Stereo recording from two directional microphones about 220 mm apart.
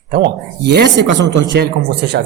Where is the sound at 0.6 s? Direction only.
50° right (ahead or behind).